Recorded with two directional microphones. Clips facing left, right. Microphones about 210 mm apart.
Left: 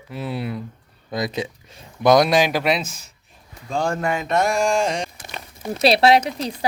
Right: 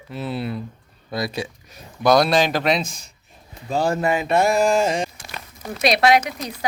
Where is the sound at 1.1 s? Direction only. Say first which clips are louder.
Left 1 dB; 20° left (ahead or behind).